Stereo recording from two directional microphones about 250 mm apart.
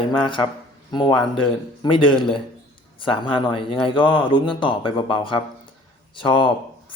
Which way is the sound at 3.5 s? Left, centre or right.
Left.